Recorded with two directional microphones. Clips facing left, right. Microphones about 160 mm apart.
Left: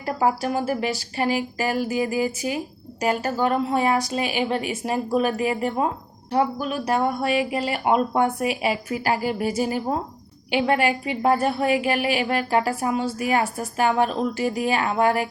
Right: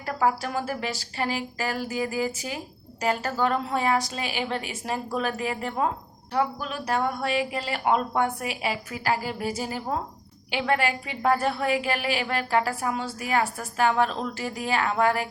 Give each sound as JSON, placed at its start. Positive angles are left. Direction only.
{"t": 0.0, "sound": "a woman's voice", "side_deg": 20}